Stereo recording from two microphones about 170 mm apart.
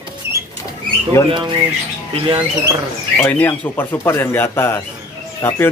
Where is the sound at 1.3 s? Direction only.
30° right (ahead or behind).